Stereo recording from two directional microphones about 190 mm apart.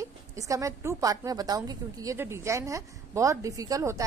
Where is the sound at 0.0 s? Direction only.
15° right (ahead or behind).